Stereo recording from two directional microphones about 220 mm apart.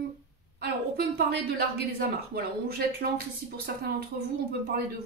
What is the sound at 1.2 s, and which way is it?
Speech, 45° right (ahead or behind).